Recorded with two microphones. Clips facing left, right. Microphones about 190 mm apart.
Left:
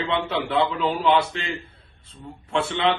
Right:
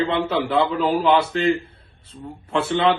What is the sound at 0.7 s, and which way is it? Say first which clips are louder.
Speech: right 4 dB; 40° right (ahead or behind).